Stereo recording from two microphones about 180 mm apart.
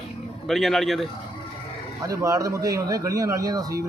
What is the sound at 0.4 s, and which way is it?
Speech, centre (ahead or behind).